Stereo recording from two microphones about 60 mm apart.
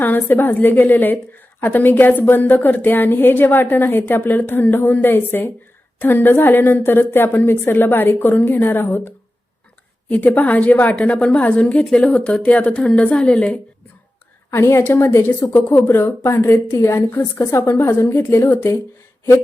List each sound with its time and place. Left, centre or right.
0.0 s a woman's voice: left; by 13.5 s centre
14.5 s a woman's voice: left
15.7 s a woman's voice: left
16.2 s a woman's voice: left
17.6 s a woman's voice: left
17.8 s a woman's voice: left